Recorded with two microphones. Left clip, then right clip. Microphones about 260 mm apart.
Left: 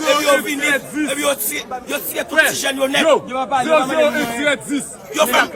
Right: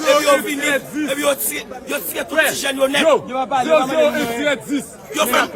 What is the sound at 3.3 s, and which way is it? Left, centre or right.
Speech, left.